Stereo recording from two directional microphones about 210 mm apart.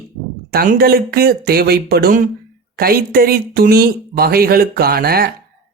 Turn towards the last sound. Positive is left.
turn(degrees=-45)  # may be behind; listen again after turning